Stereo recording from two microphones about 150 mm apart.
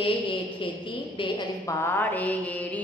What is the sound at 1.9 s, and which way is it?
Mantra, 10° left (ahead or behind).